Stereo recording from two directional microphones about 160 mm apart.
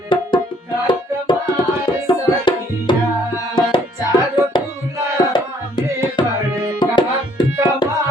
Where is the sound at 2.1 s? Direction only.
30° left (ahead or behind).